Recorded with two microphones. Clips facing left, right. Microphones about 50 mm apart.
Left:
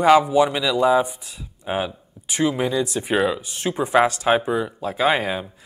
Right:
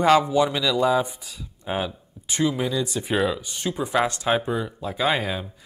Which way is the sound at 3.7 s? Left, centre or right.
Left.